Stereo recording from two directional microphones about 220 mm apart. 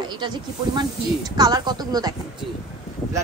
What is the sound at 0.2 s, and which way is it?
A woman's voice, 20° right (ahead or behind).